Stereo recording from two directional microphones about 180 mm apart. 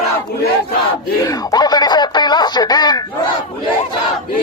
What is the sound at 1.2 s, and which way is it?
Speech, 20° left (ahead or behind).